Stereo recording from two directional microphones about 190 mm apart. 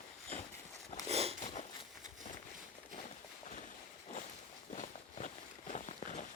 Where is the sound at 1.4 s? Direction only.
25° left (ahead or behind).